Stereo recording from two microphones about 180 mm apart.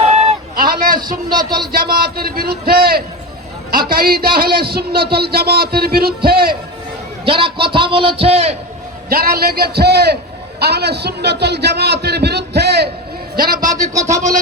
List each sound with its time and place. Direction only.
0.0 s a sound: 35° right (ahead or behind)
0.5 s a sound: 50° right (ahead or behind)
0.9 s a man's voice: 25° right (ahead or behind)
2.0 s a man's voice: 60° right (ahead or behind)
7.3 s a man's voice: 30° right (ahead or behind)
9.0 s a man's voice: 55° right (ahead or behind)
13.5 s a man's voice: 20° right (ahead or behind)